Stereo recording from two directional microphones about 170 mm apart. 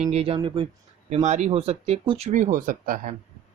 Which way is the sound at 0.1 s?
35° right (ahead or behind).